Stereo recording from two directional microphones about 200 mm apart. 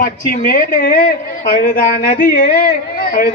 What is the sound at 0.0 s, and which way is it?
A woman's voice, 45° left (ahead or behind).